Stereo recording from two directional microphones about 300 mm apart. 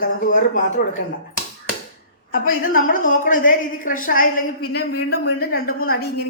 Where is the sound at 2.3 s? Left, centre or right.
Left.